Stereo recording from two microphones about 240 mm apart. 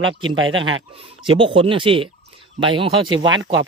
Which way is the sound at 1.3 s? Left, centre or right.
Right.